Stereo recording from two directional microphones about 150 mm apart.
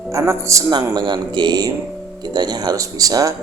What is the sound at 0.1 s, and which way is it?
Speech, 20° right (ahead or behind).